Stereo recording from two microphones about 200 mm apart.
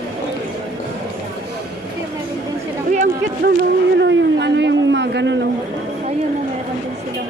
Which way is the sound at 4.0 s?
60° right (ahead or behind).